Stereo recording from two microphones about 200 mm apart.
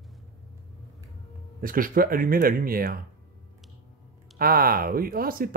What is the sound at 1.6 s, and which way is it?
Speech, 45° right (ahead or behind).